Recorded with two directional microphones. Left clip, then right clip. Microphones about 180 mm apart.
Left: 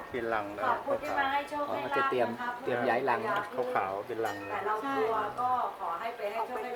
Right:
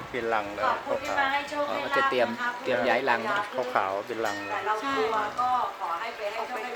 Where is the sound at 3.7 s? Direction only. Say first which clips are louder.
Right 6 dB; 40° right (ahead or behind).